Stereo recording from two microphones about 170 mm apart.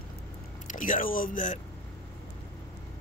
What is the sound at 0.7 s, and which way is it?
Speech, 50° left (ahead or behind).